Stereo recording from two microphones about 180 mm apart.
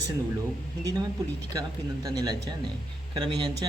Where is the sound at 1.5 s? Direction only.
20° right (ahead or behind).